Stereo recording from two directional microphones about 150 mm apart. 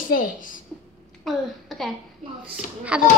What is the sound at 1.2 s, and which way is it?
Speech, centre (ahead or behind).